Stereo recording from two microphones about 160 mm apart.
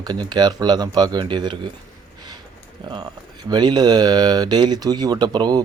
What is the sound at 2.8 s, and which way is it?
Speech, 30° right (ahead or behind).